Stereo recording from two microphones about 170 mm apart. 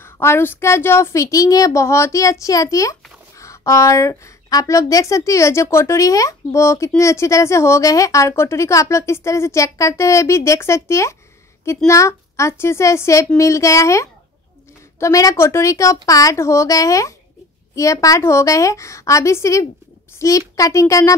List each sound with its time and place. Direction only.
0.0 s a child's voice: 15° left (ahead or behind)